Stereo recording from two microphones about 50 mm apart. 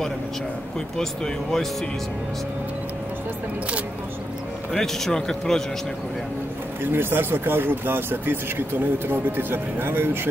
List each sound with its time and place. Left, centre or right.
0.9 s speech: centre
4.7 s speech: centre
6.8 s speech: right